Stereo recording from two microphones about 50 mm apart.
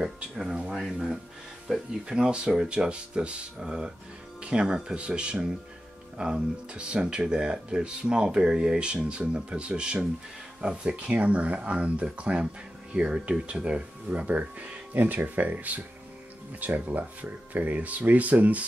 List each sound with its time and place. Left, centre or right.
0.0 s speech: centre; by 14.8 s right
15.0 s speech: right